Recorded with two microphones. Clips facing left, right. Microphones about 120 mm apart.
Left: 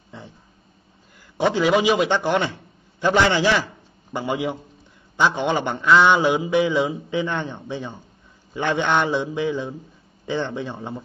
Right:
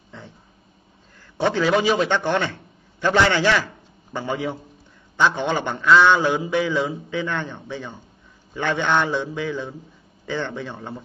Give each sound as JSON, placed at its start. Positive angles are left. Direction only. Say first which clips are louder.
{"t": 1.4, "sound": "a man's voice", "louder": "left 1 dB", "side_deg": 15}